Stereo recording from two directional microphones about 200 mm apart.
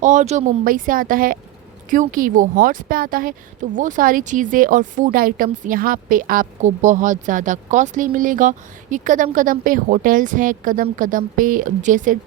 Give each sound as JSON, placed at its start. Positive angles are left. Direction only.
{"t": 0.0, "sound": "speech", "side_deg": -35}